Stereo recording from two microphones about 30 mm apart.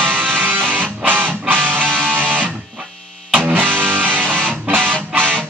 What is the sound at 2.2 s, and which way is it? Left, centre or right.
Music, right.